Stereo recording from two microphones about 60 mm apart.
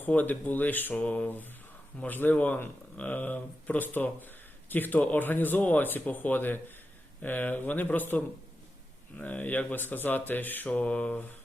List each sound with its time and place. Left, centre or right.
0.1 s speech: left
9.2 s speech: left